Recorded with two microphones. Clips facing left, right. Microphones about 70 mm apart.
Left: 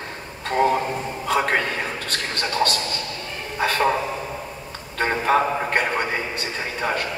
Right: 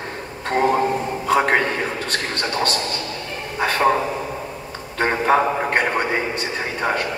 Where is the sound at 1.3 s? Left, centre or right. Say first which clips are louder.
Right 4 dB; right.